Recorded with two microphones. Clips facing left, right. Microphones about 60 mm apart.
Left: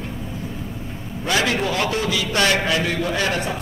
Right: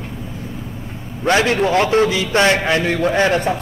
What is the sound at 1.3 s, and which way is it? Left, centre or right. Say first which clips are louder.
A man's voice: right 6 dB; right.